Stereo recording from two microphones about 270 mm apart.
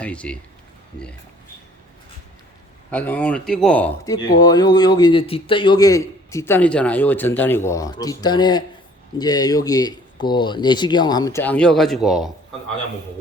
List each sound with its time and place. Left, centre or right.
0.0 s speech: centre
2.9 s speech: centre